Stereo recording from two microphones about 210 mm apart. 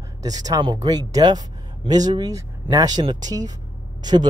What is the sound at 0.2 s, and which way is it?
Speech, 15° right (ahead or behind).